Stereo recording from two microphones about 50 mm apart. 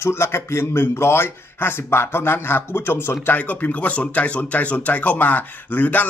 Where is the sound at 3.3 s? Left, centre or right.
Left.